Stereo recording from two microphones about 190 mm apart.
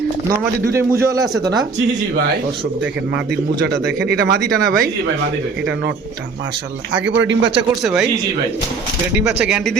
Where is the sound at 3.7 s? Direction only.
60° right (ahead or behind).